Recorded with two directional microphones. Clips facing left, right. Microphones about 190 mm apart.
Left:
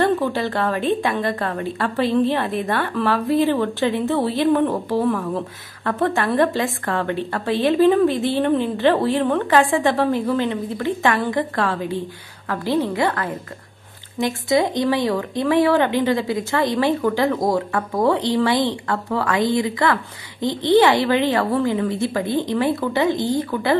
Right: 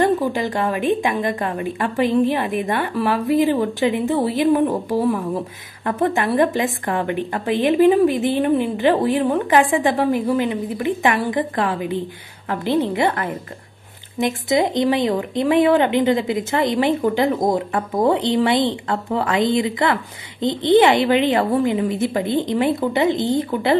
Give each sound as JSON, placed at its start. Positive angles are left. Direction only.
{"t": 0.0, "sound": "a woman's voice", "side_deg": -15}